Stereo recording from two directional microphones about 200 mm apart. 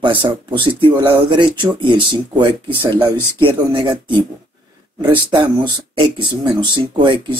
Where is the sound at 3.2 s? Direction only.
10° left (ahead or behind).